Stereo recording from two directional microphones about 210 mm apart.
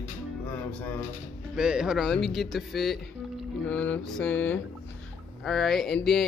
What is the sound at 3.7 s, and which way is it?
Mantra, 5° left (ahead or behind).